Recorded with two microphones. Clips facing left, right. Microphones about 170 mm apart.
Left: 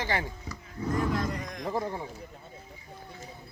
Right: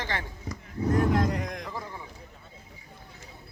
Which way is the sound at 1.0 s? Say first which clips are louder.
Right 4 dB; 50° right (ahead or behind).